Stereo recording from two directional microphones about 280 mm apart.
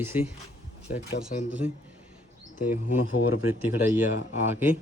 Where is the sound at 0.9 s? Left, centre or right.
Left.